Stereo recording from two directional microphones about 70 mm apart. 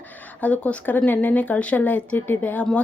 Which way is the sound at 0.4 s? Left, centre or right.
Left.